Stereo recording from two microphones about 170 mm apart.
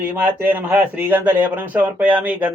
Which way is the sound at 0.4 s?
10° right (ahead or behind).